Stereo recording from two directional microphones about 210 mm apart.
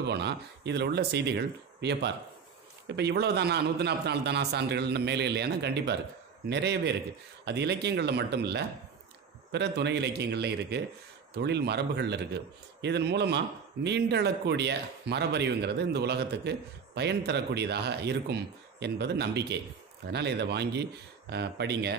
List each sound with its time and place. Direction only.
0.0 s speech: 55° right (ahead or behind)